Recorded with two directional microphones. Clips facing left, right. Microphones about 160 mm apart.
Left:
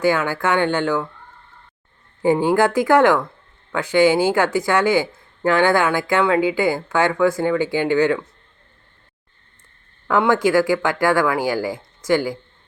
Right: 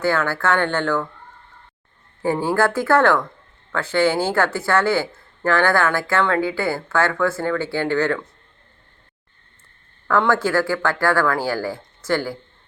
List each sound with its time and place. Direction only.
0.0 s speech: 15° left (ahead or behind)
2.2 s speech: 15° left (ahead or behind)
10.1 s speech: 15° left (ahead or behind)